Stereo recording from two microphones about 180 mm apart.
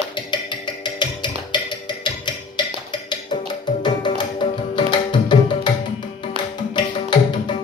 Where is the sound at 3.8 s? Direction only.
25° left (ahead or behind).